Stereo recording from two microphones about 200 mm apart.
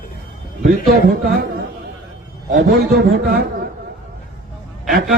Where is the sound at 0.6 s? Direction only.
45° right (ahead or behind).